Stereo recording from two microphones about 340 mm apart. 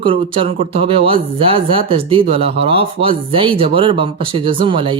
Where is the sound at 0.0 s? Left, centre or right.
Centre.